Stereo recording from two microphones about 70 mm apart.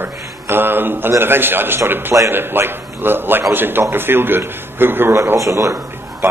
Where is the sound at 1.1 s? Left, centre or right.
Right.